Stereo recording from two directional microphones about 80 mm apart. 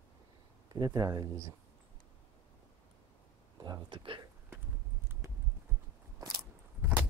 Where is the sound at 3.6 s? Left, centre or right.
Right.